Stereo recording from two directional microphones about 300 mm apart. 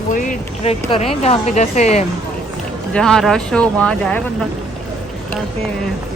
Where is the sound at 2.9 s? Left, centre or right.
Centre.